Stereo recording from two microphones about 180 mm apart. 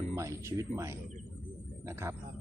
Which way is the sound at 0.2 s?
15° right (ahead or behind).